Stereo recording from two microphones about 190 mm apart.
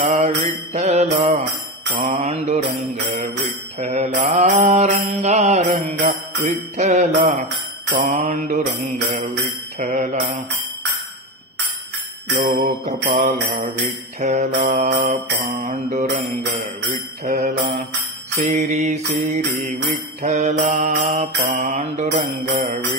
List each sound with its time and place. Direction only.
0.1 s mantra: 35° right (ahead or behind)
12.4 s mantra: 45° right (ahead or behind)